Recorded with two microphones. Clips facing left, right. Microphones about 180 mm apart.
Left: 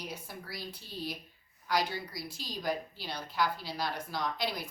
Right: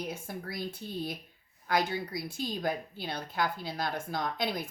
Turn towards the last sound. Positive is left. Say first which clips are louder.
# right 2 dB
turn(degrees=-50)  # may be behind; listen again after turning